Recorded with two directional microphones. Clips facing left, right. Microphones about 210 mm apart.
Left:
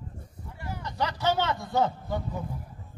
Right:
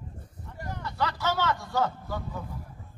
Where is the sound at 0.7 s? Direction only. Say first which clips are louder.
Even; 15° left (ahead or behind).